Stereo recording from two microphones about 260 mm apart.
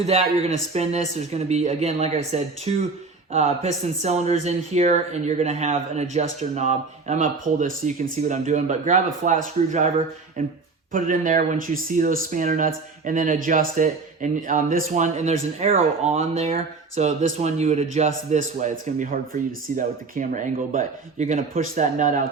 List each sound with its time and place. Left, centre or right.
0.0 s speech: right
10.9 s speech: right